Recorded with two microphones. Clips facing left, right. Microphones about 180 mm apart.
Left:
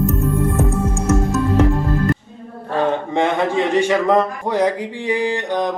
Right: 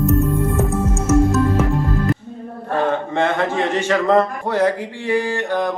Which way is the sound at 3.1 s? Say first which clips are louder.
Left 1 dB; 15° left (ahead or behind).